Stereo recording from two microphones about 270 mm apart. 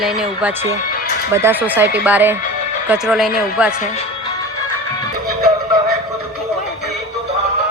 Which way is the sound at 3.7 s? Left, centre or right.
Left.